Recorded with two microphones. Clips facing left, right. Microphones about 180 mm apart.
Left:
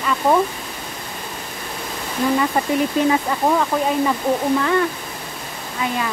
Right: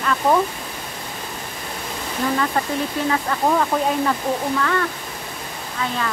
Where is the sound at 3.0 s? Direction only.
20° left (ahead or behind).